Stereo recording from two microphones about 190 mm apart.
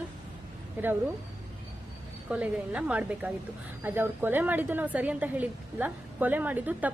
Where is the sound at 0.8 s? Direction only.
10° right (ahead or behind).